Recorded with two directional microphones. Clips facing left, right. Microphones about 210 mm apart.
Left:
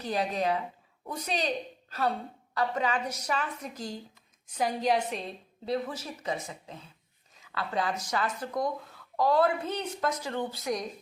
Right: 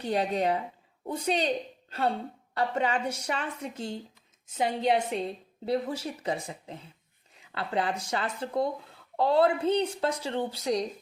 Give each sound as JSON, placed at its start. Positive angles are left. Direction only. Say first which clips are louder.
{"t": 0.0, "sound": "a woman's voice", "louder": "right 2 dB", "side_deg": -30}